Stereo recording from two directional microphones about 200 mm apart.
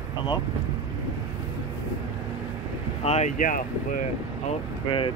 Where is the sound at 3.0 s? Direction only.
35° left (ahead or behind).